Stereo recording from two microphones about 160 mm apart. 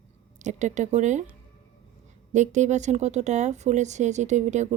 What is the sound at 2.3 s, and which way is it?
Speech, 50° right (ahead or behind).